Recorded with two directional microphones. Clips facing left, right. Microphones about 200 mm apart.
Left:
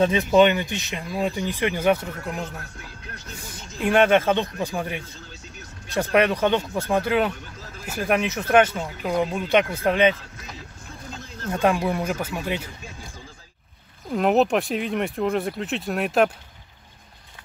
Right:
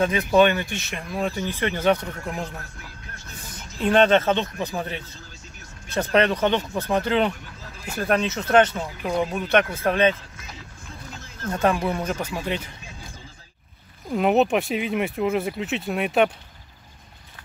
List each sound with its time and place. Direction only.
0.0 s speech: 25° left (ahead or behind); by 2.3 s 5° left (ahead or behind)
3.8 s speech: 10° left (ahead or behind)
11.6 s speech: 15° left (ahead or behind)
14.1 s speech: centre (ahead or behind)